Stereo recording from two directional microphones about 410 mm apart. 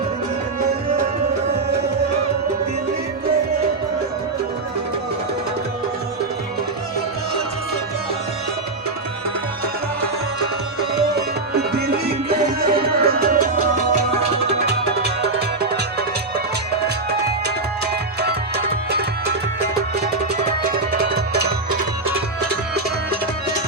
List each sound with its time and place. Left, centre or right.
12.3 s music: right
18.9 s music: right
20.7 s music: right